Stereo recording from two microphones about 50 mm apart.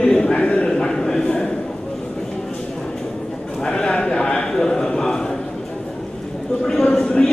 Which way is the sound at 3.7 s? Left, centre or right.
Centre.